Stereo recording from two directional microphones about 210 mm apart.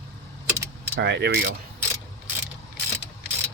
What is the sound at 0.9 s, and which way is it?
Mechanisms, 55° right (ahead or behind).